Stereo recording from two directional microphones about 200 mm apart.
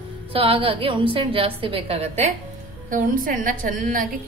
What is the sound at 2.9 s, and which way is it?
A woman's voice, 40° right (ahead or behind).